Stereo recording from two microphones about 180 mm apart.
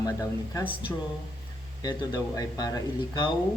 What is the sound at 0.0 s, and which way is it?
Speech, 20° left (ahead or behind).